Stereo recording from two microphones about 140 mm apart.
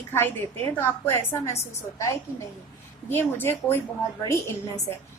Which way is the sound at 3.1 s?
15° left (ahead or behind).